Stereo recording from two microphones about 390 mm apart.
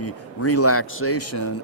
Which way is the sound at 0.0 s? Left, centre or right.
Left.